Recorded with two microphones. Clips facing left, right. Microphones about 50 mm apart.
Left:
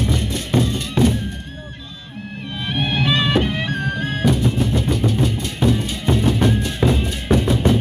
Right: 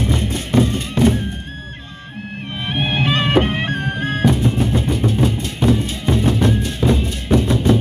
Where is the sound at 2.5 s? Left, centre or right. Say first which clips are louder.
Right 1 dB; right.